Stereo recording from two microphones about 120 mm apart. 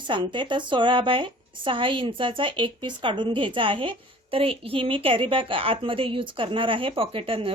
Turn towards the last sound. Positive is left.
turn(degrees=-50)  # may be behind; listen again after turning